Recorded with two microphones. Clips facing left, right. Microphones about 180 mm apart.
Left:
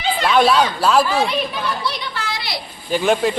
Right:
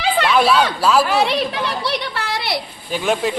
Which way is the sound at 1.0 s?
70° right (ahead or behind).